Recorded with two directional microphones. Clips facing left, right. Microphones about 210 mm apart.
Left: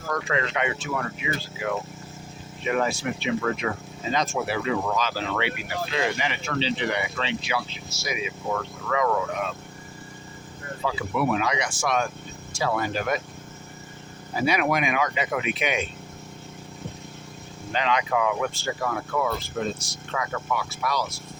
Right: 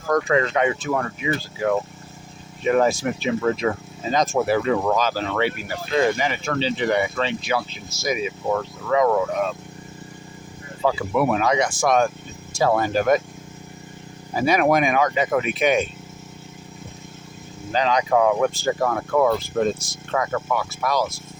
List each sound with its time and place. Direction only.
0.1 s speech: 45° right (ahead or behind)
8.9 s speech: 30° right (ahead or behind)
10.8 s speech: 50° right (ahead or behind)
14.4 s speech: 45° right (ahead or behind)
17.7 s speech: 35° right (ahead or behind)